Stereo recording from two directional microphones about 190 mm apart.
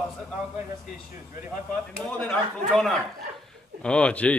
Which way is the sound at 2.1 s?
5° left (ahead or behind).